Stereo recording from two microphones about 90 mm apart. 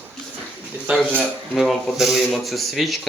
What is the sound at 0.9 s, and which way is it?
Speech, 10° right (ahead or behind).